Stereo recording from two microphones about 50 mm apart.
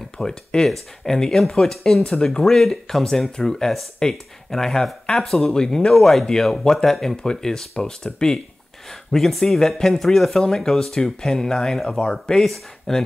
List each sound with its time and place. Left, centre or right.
0.2 s speech: centre
5.9 s speech: centre
12.4 s speech: centre